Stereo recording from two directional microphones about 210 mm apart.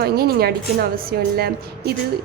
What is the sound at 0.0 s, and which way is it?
A woman's voice, 50° right (ahead or behind).